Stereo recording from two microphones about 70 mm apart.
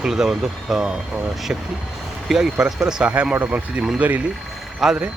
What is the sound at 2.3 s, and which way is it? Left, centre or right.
Speech, centre.